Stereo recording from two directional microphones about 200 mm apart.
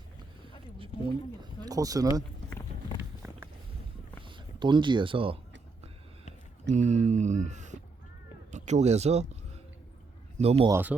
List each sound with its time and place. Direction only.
1.4 s a sound: 20° right (ahead or behind)
3.0 s walk: 10° right (ahead or behind)
4.3 s speech: 25° right (ahead or behind)
6.7 s a man's voice: 35° right (ahead or behind)
10.7 s speech: 10° right (ahead or behind)